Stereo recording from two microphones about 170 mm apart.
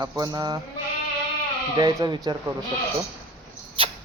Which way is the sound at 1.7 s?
20° right (ahead or behind).